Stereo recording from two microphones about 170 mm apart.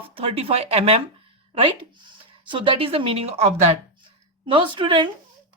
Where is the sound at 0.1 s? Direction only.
35° right (ahead or behind).